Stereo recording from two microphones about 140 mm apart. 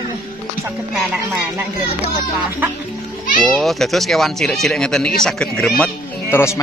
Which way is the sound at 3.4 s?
Centre (ahead or behind).